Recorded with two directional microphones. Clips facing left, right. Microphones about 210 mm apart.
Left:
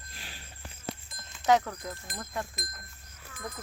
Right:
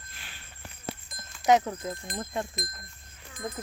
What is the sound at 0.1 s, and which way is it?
Insect, 35° left (ahead or behind).